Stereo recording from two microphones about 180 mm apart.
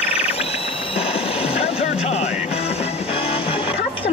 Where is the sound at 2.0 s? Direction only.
35° left (ahead or behind).